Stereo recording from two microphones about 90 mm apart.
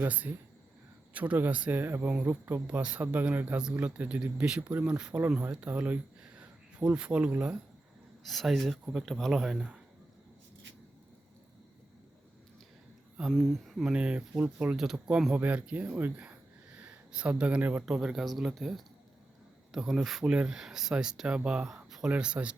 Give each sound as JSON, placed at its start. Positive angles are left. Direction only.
{"t": 0.0, "sound": "speech", "side_deg": -20}
{"t": 8.2, "sound": "speech", "side_deg": 0}
{"t": 13.3, "sound": "speech", "side_deg": 5}
{"t": 13.9, "sound": "speech", "side_deg": -10}
{"t": 17.8, "sound": "speech", "side_deg": -5}